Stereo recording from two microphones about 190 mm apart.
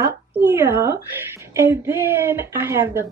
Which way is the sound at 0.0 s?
10° right (ahead or behind).